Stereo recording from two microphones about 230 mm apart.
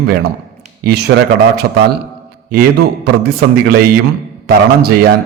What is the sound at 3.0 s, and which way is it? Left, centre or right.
A man's voice, right.